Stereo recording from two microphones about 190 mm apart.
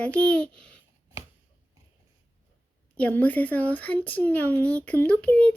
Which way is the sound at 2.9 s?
5° left (ahead or behind).